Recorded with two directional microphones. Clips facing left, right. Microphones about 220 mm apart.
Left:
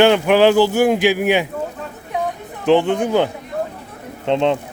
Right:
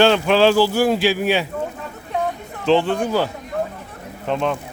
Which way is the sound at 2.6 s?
15° left (ahead or behind).